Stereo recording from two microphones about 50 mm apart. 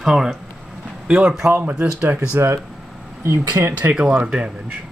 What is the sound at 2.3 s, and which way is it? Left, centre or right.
Speech, right.